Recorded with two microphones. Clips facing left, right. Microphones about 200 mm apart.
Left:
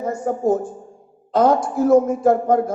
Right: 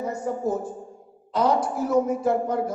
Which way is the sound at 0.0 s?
50° left (ahead or behind).